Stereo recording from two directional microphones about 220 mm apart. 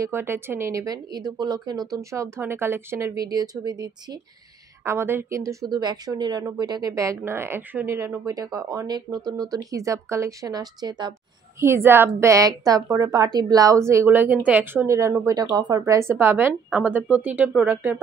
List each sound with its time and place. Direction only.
0.0 s speech: 10° right (ahead or behind)